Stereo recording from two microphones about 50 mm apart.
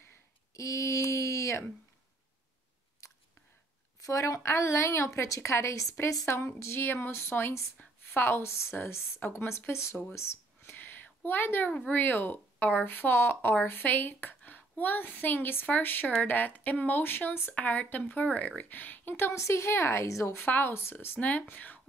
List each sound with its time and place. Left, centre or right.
0.6 s a sound: left
3.0 s chewing: left
4.1 s a woman's voice: left
6.2 s a woman's voice: left
8.1 s speech: left
8.4 s a woman's voice: left
9.7 s a woman's voice: left
10.1 s a sound: left
10.7 s a sound: left
11.2 s speech: left
19.3 s a woman's voice: left
20.3 s speech: left
21.2 s speech: left